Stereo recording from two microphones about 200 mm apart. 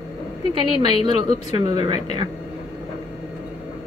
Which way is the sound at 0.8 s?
20° right (ahead or behind).